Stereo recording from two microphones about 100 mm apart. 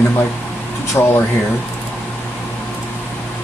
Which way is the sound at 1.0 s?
35° left (ahead or behind).